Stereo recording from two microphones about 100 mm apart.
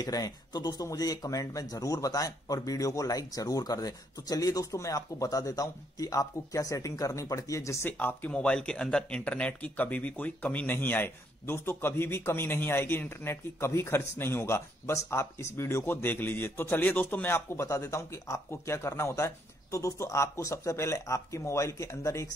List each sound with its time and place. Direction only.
0.0 s speech: 40° left (ahead or behind)
8.0 s speech: 15° left (ahead or behind)